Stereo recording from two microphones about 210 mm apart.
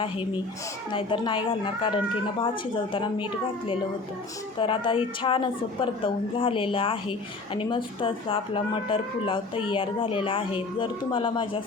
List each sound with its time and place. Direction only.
0.9 s a woman's voice: 25° left (ahead or behind)
4.6 s a woman's voice: 25° left (ahead or behind)